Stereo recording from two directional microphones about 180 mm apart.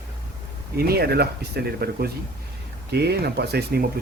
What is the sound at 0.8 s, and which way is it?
Speech, 60° right (ahead or behind).